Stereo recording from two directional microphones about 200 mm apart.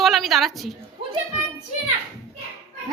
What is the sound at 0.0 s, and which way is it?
Speech, centre (ahead or behind).